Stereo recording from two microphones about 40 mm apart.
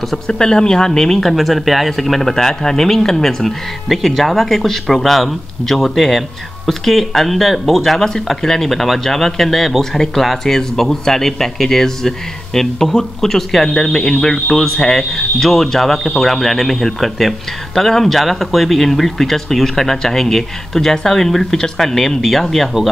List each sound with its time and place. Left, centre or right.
0.3 s speech: centre
1.3 s speech: centre